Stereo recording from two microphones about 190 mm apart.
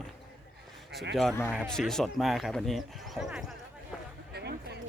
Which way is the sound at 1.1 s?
Centre (ahead or behind).